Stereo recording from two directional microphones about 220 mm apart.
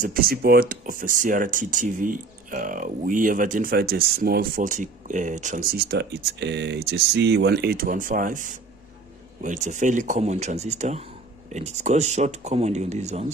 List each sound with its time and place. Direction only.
0.0 s speech: 40° right (ahead or behind)